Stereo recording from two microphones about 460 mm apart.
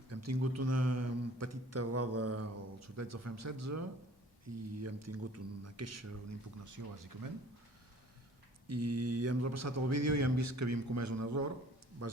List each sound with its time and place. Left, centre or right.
0.1 s speech: right
8.6 s a man's voice: right